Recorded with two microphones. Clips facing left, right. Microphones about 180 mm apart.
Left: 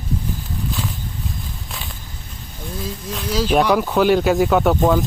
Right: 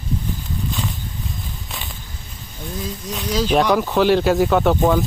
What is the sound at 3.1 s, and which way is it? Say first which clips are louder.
Speech: even; 5° left (ahead or behind).